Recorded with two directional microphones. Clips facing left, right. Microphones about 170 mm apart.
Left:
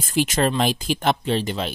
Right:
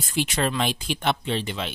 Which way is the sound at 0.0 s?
45° left (ahead or behind).